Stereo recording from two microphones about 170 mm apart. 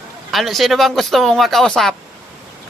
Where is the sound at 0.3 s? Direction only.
Centre (ahead or behind).